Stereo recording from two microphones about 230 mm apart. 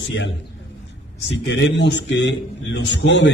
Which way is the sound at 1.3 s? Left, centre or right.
Left.